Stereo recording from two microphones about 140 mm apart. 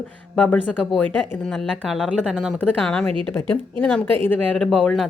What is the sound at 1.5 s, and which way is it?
A woman's voice, centre (ahead or behind).